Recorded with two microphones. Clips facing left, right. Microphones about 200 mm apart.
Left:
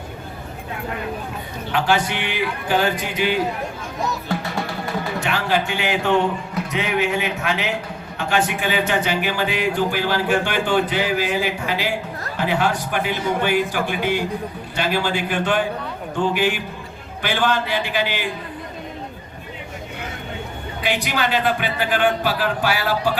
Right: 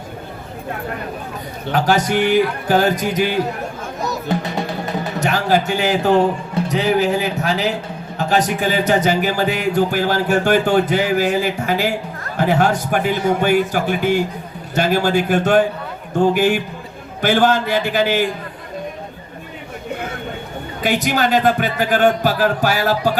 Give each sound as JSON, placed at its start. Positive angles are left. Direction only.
{"t": 1.7, "sound": "speech", "side_deg": -40}
{"t": 4.3, "sound": "music", "side_deg": -20}
{"t": 5.2, "sound": "a man's voice", "side_deg": -40}
{"t": 20.8, "sound": "speech", "side_deg": -45}